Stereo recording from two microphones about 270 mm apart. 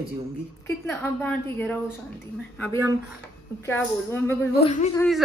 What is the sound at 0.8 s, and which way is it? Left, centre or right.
Speech, centre.